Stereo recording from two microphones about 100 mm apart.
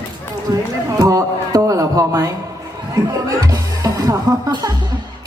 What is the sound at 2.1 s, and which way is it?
Speech, 35° right (ahead or behind).